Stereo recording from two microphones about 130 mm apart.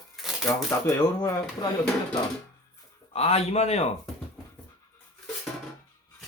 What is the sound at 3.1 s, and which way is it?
Speech, 55° left (ahead or behind).